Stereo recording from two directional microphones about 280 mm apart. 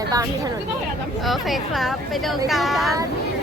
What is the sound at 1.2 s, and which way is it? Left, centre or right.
Speech, centre.